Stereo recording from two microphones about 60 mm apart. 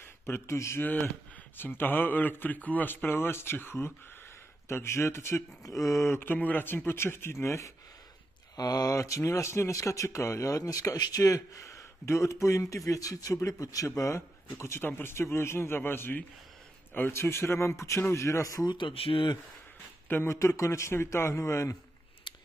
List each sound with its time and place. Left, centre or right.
0.0 s speech: left
1.6 s a man's voice: left
5.6 s speech: left
6.3 s a man's voice: left
8.5 s a man's voice: left
13.8 s speech: left
14.8 s a man's voice: left
15.1 s speech: left
20.2 s speech: left